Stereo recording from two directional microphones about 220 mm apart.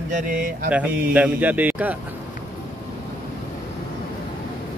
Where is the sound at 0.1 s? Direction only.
35° right (ahead or behind).